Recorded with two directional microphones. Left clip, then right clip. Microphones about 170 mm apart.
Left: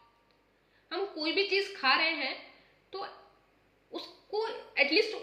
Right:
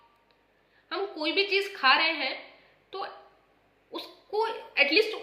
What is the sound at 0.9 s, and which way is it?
A woman's voice, 20° left (ahead or behind).